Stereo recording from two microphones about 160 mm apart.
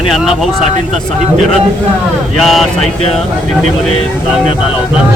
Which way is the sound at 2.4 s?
Centre (ahead or behind).